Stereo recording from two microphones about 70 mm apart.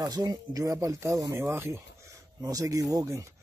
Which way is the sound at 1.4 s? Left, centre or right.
Right.